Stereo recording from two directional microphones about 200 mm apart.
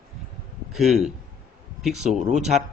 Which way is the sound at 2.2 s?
35° right (ahead or behind).